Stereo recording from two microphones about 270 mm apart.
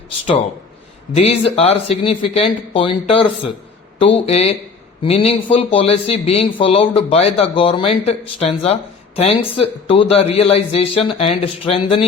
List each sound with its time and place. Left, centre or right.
1.1 s speech: left